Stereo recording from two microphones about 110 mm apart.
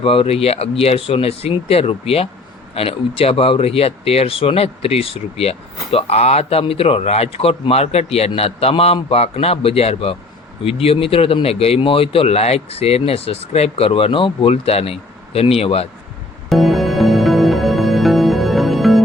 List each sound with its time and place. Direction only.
0.0 s speech: 60° left (ahead or behind)
14.5 s speech: 65° left (ahead or behind)
16.5 s music: centre (ahead or behind)